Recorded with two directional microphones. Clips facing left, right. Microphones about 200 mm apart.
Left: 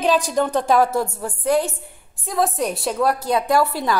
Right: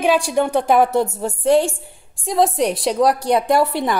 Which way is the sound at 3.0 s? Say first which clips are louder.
Right 3 dB; 75° right (ahead or behind).